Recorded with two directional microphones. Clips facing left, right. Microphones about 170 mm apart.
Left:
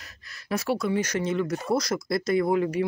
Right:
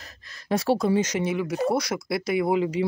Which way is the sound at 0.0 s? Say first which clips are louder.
Right 2 dB; 30° right (ahead or behind).